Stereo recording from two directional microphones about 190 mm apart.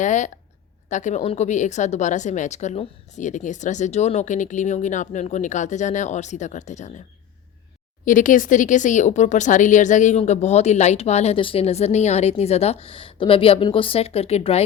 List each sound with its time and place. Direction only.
0.0 s a woman's voice: 40° left (ahead or behind)
8.0 s speech: 45° left (ahead or behind)